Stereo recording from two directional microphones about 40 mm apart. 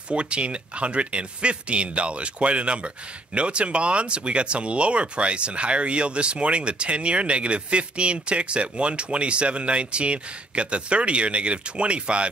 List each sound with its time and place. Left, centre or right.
0.1 s speech: right